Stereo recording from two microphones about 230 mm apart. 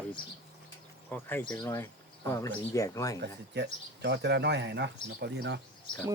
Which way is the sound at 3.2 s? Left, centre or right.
Right.